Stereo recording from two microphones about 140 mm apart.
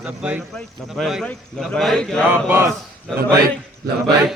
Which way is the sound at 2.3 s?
15° right (ahead or behind).